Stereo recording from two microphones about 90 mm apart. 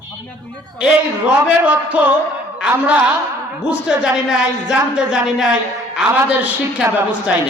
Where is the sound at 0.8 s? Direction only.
10° right (ahead or behind).